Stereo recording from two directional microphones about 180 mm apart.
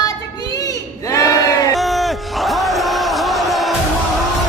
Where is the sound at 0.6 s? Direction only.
20° left (ahead or behind).